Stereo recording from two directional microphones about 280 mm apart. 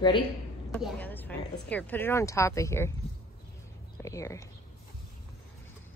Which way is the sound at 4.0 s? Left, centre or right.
Centre.